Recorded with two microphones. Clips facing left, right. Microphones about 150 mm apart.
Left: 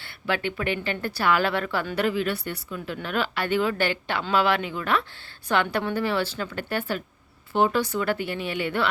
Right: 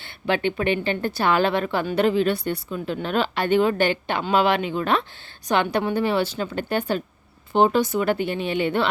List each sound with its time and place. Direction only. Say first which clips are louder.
0.0 s a woman's voice: right 5 dB; 25° right (ahead or behind)